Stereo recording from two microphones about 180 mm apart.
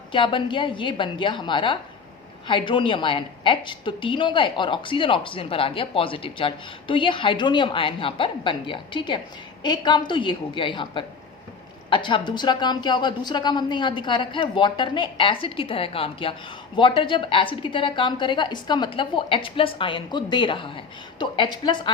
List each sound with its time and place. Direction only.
0.1 s a woman's voice: 30° left (ahead or behind)